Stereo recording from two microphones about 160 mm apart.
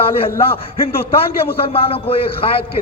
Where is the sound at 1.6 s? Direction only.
35° left (ahead or behind).